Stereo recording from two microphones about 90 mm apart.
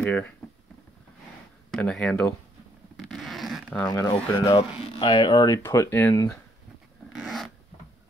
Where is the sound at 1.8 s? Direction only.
15° left (ahead or behind).